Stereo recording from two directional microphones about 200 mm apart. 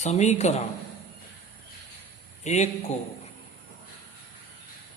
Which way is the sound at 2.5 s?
35° left (ahead or behind).